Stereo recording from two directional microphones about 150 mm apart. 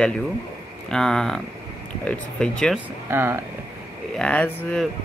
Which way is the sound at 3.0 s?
15° right (ahead or behind).